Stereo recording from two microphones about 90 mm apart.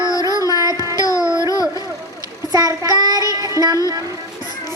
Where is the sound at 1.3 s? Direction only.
50° right (ahead or behind).